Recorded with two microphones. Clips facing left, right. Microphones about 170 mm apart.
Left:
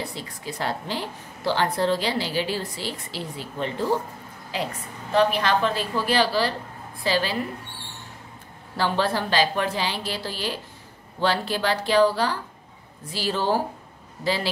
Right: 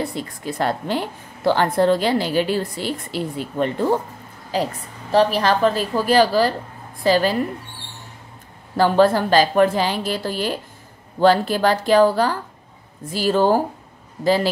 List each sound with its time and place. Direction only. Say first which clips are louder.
0.0 s a woman's voice: right 7 dB; 50° right (ahead or behind)
4.5 s a woman's voice: right 6 dB; 40° right (ahead or behind)
8.7 s a woman's voice: right 9 dB; 45° right (ahead or behind)